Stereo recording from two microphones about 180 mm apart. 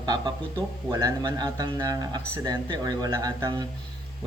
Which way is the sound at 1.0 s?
25° right (ahead or behind).